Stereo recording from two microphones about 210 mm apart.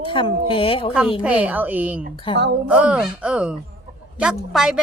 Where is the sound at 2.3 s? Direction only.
25° left (ahead or behind).